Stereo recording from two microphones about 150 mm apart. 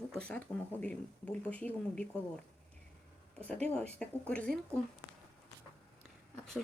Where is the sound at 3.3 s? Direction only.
5° left (ahead or behind).